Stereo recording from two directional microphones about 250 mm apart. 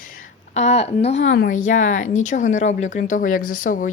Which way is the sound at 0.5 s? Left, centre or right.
Left.